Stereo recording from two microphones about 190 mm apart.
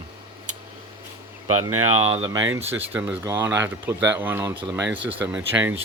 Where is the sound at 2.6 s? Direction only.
10° right (ahead or behind).